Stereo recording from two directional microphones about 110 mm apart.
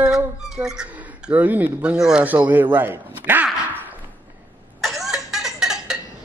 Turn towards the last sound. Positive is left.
turn(degrees=-5)  # may be behind; listen again after turning